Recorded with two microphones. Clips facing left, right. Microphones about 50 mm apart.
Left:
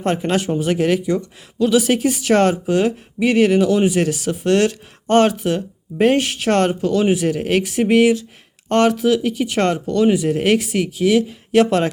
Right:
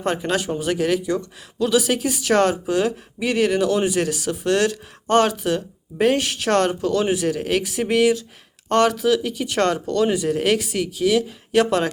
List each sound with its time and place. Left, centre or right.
0.2 s speech: left